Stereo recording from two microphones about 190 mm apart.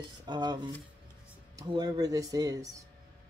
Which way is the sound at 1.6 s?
20° right (ahead or behind).